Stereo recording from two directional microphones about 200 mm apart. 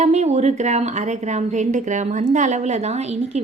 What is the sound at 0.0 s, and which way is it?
A woman's voice, 35° right (ahead or behind).